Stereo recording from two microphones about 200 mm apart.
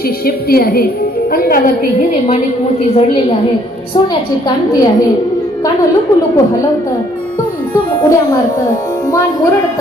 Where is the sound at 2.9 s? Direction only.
30° left (ahead or behind).